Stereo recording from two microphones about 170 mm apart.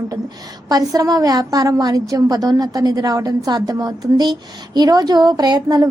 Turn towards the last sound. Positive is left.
turn(degrees=-25)  # may be behind; listen again after turning